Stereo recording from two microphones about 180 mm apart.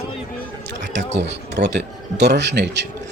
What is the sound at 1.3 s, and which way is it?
A man's voice, 70° right (ahead or behind).